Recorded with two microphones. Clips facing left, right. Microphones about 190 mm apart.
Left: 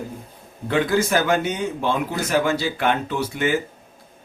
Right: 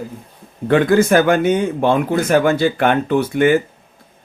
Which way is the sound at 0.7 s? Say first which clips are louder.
Right 7 dB; 55° right (ahead or behind).